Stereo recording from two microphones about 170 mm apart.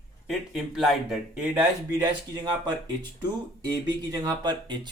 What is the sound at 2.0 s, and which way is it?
Speech, 25° right (ahead or behind).